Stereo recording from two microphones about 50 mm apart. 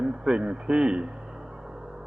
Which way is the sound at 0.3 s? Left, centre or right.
Centre.